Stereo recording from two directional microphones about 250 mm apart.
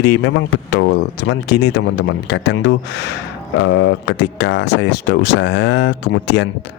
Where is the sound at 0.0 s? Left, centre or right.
Left.